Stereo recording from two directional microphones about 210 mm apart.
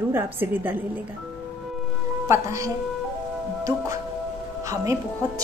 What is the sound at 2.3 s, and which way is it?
Speech, 15° right (ahead or behind).